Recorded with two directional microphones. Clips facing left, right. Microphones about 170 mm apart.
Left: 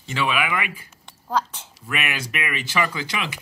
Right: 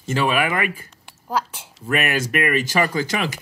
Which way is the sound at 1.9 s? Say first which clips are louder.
Right 7 dB; 40° right (ahead or behind).